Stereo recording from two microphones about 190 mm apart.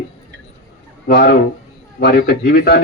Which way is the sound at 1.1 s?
60° left (ahead or behind).